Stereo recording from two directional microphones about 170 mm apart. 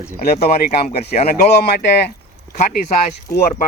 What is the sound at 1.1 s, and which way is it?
Speech, 55° left (ahead or behind).